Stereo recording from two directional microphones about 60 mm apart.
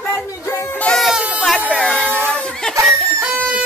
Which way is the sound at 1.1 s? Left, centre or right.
Right.